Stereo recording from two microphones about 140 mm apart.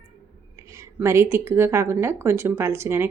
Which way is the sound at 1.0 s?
20° right (ahead or behind).